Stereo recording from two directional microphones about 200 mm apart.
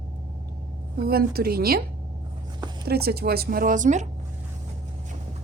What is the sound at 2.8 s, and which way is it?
Speech, 50° right (ahead or behind).